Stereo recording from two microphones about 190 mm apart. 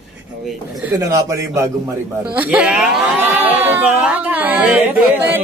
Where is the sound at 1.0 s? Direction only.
15° right (ahead or behind).